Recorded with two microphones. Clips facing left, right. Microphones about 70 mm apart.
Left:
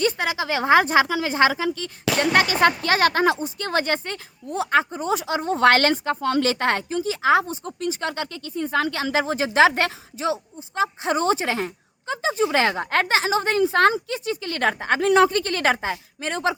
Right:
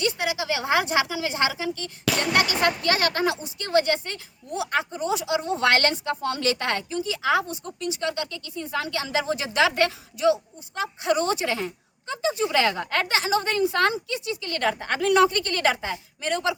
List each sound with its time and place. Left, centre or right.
0.0 s a woman's voice: left